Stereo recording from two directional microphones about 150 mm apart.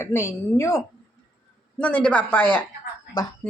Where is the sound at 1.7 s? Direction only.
10° left (ahead or behind).